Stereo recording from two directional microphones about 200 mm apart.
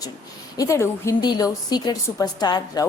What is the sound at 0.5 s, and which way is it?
A woman's voice, 15° left (ahead or behind).